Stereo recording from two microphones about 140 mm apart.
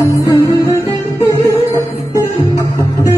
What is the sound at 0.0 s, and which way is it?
Music, 20° left (ahead or behind).